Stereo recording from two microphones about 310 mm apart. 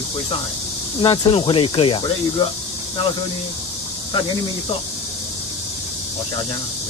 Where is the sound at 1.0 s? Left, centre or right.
Centre.